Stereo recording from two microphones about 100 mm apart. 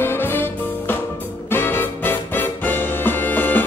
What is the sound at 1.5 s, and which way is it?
Music, 20° left (ahead or behind).